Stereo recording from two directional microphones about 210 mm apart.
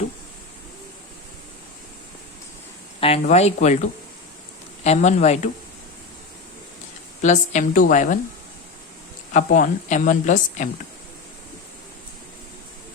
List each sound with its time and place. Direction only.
3.0 s speech: 30° left (ahead or behind)
7.2 s speech: 35° left (ahead or behind)
9.3 s speech: 40° left (ahead or behind)